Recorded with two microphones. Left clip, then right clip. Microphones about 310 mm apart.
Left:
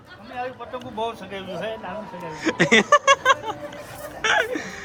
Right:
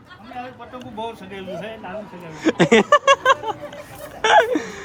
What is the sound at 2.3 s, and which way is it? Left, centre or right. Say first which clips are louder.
Speech: right 3 dB; centre.